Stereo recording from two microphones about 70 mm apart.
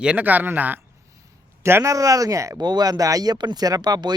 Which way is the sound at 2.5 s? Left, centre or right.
Right.